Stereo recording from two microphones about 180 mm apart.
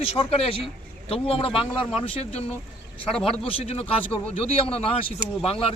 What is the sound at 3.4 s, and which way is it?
A man's voice, 35° left (ahead or behind).